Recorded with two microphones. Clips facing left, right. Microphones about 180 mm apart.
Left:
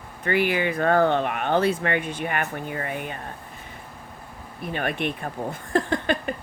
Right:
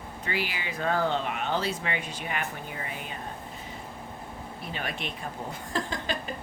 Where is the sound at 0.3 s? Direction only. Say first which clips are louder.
Left 11 dB; 55° left (ahead or behind).